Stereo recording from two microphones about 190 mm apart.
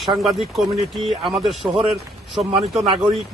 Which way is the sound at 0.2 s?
Centre (ahead or behind).